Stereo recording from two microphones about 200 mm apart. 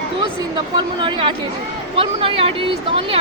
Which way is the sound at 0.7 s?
25° right (ahead or behind).